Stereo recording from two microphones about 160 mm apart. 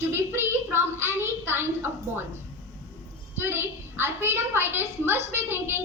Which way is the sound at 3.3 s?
15° right (ahead or behind).